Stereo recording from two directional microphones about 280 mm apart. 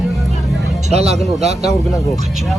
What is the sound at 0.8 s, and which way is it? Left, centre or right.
Speech, right.